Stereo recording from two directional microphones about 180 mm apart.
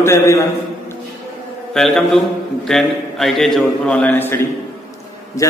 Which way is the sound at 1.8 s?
Centre (ahead or behind).